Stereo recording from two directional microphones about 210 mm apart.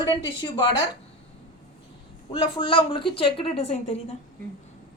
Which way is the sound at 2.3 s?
20° left (ahead or behind).